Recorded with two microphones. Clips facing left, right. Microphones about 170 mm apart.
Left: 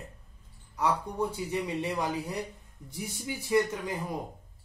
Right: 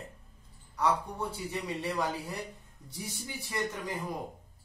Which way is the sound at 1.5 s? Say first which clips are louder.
Left 3 dB; 15° left (ahead or behind).